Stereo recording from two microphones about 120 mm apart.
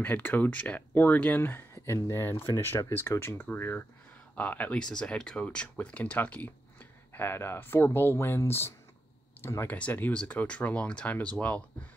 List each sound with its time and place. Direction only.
0.0 s speech: 15° left (ahead or behind)